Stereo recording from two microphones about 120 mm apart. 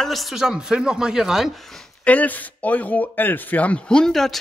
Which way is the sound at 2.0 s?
15° left (ahead or behind).